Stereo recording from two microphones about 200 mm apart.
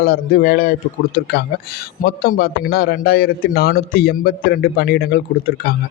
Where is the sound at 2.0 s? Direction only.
50° left (ahead or behind).